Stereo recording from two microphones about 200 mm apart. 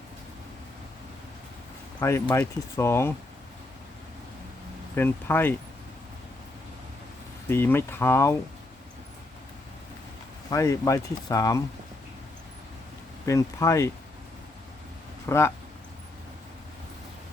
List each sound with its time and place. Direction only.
2.0 s speech: 15° left (ahead or behind)
4.9 s speech: 10° left (ahead or behind)
7.4 s speech: 10° left (ahead or behind)
10.5 s speech: 15° left (ahead or behind)
13.2 s speech: 15° left (ahead or behind)
15.3 s speech: 15° left (ahead or behind)